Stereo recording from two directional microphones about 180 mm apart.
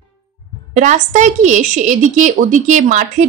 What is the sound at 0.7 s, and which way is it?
A woman's voice, 45° right (ahead or behind).